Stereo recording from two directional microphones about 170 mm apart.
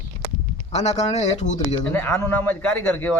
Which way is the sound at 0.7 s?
40° left (ahead or behind).